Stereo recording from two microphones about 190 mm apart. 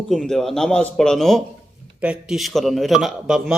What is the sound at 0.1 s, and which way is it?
A man's voice, centre (ahead or behind).